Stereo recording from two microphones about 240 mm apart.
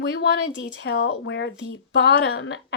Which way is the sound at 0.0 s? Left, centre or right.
Left.